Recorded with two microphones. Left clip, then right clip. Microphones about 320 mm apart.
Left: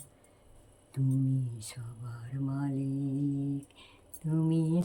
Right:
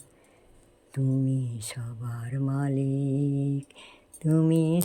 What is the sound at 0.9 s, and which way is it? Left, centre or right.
Mantra, centre.